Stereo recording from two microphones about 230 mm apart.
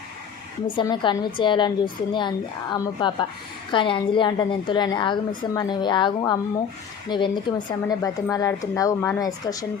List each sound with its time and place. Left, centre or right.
0.8 s a woman's voice: centre